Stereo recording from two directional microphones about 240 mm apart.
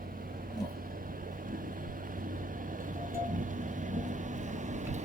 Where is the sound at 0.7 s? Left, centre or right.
Right.